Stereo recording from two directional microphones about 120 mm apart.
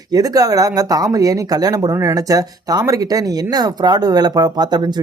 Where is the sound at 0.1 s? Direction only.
30° right (ahead or behind).